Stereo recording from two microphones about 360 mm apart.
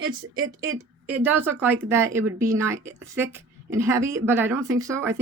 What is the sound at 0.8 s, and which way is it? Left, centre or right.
Speech, centre.